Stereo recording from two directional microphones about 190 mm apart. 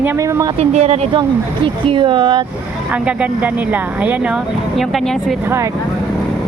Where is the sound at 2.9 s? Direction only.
5° right (ahead or behind).